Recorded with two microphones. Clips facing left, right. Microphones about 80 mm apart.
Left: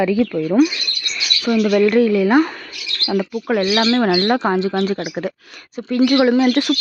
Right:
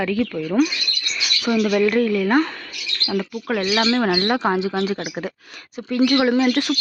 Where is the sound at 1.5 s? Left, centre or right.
Centre.